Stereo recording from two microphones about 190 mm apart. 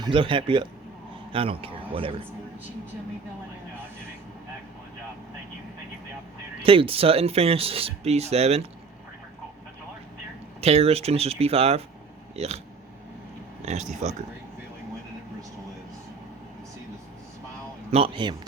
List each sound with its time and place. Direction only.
0.0 s a man's voice: 25° right (ahead or behind)
6.6 s speech: 30° right (ahead or behind)
10.6 s speech: 30° right (ahead or behind)
13.7 s speech: 35° right (ahead or behind)
17.9 s speech: 25° right (ahead or behind)